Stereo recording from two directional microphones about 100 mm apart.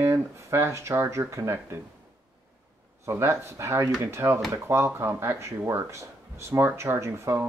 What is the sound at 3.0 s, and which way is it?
Speech, 25° right (ahead or behind).